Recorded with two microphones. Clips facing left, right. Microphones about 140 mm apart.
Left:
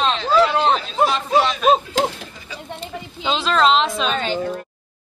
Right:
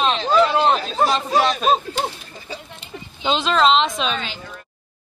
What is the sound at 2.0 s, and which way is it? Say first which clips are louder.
Bird: left 5 dB; 90° left.